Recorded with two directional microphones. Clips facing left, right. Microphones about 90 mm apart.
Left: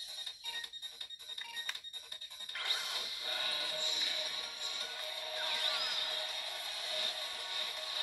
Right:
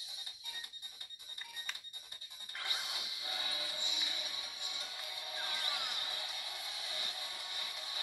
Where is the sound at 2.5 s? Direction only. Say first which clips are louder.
Left 1 dB; 15° right (ahead or behind).